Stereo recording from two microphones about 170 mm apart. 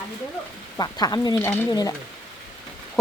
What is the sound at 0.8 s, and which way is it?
Speech, 25° left (ahead or behind).